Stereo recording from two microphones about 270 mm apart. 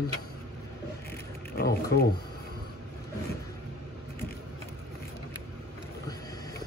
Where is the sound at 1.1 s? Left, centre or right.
Left.